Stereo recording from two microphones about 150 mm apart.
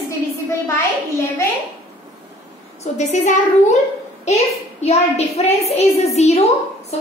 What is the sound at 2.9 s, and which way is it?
Speech, 50° left (ahead or behind).